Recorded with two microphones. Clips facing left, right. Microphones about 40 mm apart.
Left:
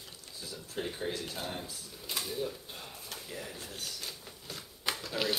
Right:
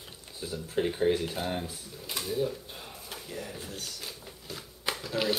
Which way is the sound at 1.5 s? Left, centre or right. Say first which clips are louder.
Right 6 dB; right.